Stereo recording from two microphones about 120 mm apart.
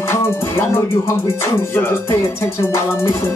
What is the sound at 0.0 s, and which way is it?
Music, 20° left (ahead or behind).